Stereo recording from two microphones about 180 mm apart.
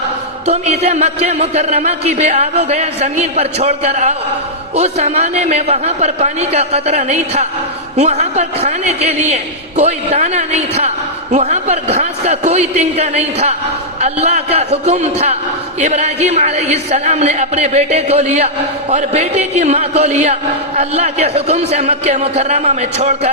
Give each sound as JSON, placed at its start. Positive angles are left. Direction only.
{"t": 0.4, "sound": "a man's voice", "side_deg": -35}